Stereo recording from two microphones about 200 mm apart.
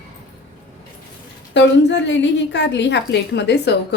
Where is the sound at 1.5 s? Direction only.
60° left (ahead or behind).